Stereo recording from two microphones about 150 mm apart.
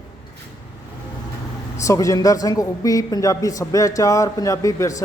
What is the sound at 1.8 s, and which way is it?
Speech, 20° left (ahead or behind).